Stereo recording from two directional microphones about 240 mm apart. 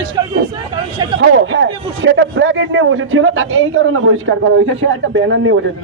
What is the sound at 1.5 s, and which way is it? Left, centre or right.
A man's voice, right.